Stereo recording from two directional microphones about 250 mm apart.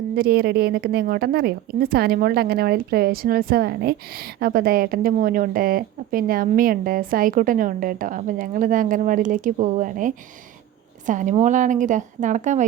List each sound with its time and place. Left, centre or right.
0.2 s a woman's voice: right